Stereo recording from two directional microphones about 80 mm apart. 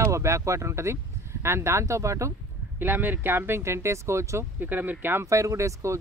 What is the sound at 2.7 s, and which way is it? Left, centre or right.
Speech, right.